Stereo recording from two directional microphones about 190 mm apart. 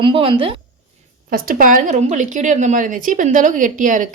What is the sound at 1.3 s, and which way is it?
Speech, 50° right (ahead or behind).